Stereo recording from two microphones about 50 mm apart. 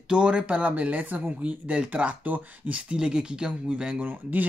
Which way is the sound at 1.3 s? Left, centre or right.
Right.